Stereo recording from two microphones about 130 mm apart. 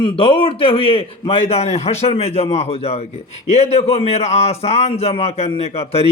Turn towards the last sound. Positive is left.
turn(degrees=50)  # may be behind; listen again after turning